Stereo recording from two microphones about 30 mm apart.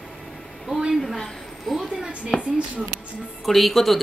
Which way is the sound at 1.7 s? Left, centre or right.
Centre.